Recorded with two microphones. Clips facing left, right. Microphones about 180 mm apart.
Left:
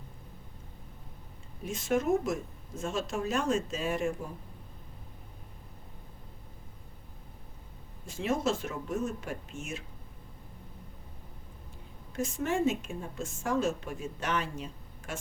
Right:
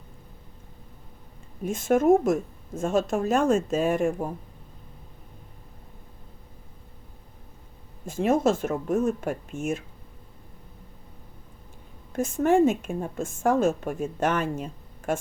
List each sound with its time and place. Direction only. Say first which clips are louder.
1.6 s a woman's voice: right 8 dB; 50° right (ahead or behind)
8.0 s a woman's voice: right 8 dB; 50° right (ahead or behind)
12.1 s a woman's voice: right 10 dB; 50° right (ahead or behind)